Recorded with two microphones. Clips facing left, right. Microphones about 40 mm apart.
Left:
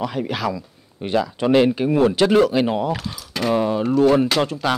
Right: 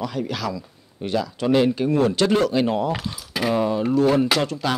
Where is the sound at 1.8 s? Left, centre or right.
Centre.